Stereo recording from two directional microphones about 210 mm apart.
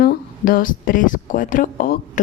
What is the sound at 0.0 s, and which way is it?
Speech, 40° left (ahead or behind).